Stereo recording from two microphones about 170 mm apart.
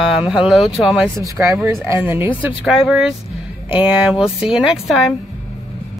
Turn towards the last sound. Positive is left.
turn(degrees=-5)  # may be behind; listen again after turning